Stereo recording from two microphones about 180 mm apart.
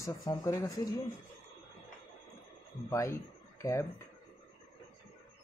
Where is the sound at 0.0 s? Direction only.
20° left (ahead or behind).